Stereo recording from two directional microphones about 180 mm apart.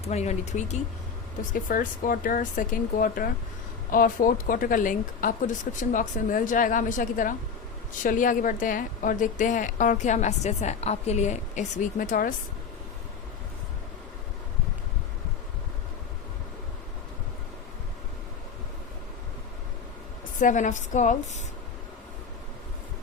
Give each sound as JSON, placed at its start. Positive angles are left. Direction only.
{"t": 0.1, "sound": "a woman's voice", "side_deg": 40}
{"t": 20.4, "sound": "a woman's voice", "side_deg": 45}